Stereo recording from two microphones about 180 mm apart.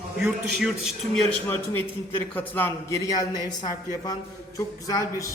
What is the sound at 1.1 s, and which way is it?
A man's voice, 5° left (ahead or behind).